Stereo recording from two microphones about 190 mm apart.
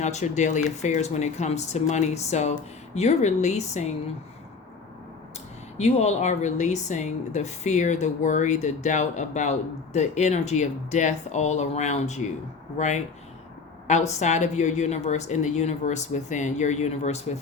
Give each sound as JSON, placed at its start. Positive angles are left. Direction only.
{"t": 0.0, "sound": "speech", "side_deg": 40}
{"t": 5.7, "sound": "speech", "side_deg": 35}